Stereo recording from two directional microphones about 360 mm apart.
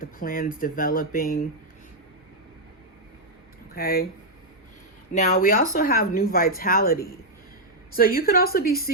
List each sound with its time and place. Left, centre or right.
0.0 s speech: left
3.8 s speech: left
5.1 s speech: left